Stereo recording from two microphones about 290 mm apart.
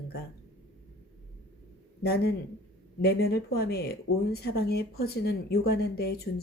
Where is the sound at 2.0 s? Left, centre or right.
Left.